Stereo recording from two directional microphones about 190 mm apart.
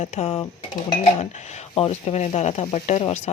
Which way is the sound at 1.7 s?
30° left (ahead or behind).